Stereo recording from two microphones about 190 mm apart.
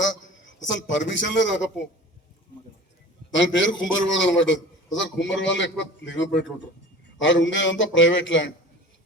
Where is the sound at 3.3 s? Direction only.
75° left (ahead or behind).